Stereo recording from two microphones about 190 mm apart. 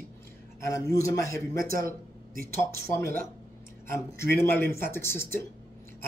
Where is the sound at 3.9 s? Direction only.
15° left (ahead or behind).